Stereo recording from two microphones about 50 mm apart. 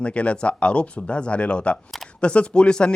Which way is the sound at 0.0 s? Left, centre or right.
Left.